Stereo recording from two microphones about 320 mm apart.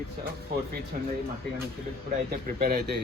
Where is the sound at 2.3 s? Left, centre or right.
Right.